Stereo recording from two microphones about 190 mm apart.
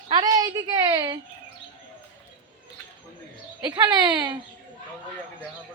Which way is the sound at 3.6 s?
20° right (ahead or behind).